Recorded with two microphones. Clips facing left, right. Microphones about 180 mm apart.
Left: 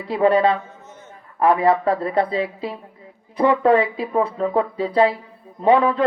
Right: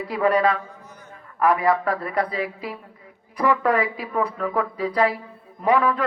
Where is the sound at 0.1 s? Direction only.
25° left (ahead or behind).